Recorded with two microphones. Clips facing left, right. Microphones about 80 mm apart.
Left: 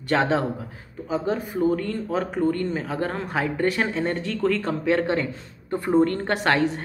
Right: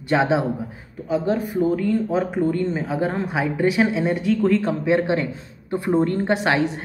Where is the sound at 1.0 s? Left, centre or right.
Centre.